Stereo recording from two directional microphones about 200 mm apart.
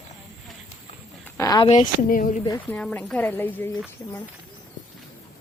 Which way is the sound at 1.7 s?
40° left (ahead or behind).